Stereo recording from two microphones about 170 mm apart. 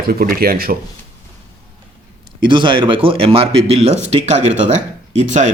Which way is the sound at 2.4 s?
30° right (ahead or behind).